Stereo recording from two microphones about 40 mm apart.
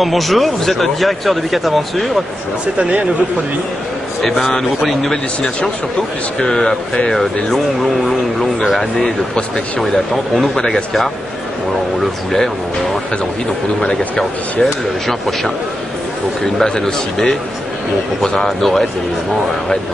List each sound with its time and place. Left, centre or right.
0.0 s speech: centre
2.8 s speech: right
4.2 s speech: centre
6.4 s speech: centre
10.5 s speech: centre
13.7 s speech: centre
16.5 s speech: centre